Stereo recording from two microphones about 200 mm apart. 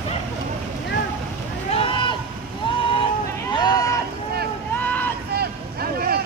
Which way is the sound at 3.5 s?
20° left (ahead or behind).